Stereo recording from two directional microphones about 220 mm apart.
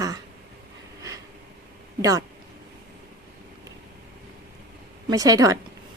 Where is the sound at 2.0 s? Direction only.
15° right (ahead or behind).